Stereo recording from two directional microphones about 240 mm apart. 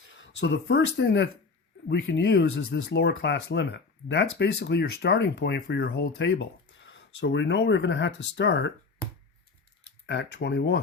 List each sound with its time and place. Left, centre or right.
0.1 s speech: left
10.1 s speech: left